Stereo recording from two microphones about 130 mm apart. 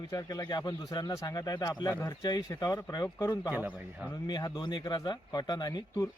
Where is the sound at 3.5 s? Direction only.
10° right (ahead or behind).